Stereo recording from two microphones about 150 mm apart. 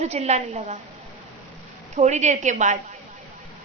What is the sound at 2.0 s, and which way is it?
Speech, 50° right (ahead or behind).